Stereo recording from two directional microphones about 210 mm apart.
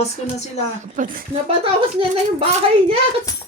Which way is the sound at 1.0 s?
40° right (ahead or behind).